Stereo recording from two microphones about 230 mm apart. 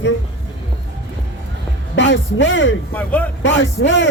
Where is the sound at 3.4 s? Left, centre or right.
Left.